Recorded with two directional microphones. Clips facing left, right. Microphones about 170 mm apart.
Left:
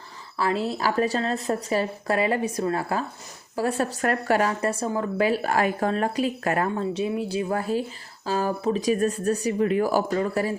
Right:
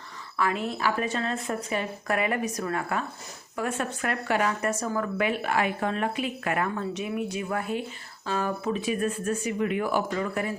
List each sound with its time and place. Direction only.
0.3 s speech: 35° left (ahead or behind)